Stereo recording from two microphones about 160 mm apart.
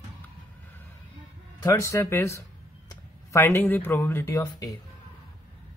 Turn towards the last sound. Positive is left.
turn(degrees=20)  # may be behind; listen again after turning